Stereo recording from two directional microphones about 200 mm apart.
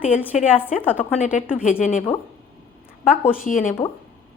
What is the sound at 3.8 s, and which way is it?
Speech, 15° left (ahead or behind).